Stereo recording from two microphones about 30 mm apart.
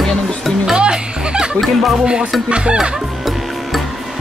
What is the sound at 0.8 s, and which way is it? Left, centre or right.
Speech, right.